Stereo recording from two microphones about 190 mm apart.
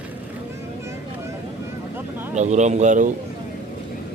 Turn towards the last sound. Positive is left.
turn(degrees=-40)  # may be behind; listen again after turning